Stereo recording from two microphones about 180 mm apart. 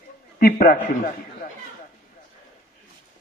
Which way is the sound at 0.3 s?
55° left (ahead or behind).